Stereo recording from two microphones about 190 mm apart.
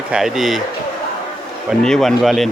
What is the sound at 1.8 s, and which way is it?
Speech, centre (ahead or behind).